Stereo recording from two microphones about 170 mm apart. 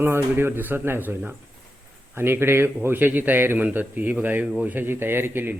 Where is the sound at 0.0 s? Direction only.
15° right (ahead or behind).